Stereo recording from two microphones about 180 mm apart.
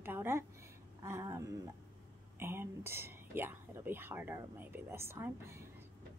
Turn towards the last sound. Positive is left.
turn(degrees=-15)  # may be behind; listen again after turning